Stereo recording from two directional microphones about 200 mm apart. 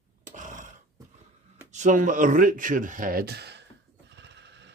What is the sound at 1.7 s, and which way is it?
Speech, 35° right (ahead or behind).